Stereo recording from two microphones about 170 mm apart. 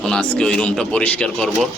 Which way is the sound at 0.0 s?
5° left (ahead or behind).